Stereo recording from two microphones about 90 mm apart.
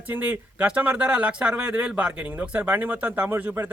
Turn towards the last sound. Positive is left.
turn(degrees=-25)  # may be behind; listen again after turning